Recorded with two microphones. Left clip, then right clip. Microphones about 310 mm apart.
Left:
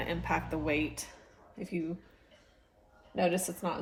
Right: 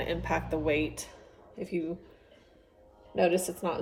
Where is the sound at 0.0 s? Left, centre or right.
Centre.